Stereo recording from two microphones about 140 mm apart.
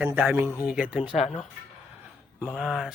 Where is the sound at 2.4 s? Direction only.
10° right (ahead or behind).